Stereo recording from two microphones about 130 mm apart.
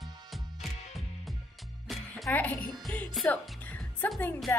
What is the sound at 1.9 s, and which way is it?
Music, centre (ahead or behind).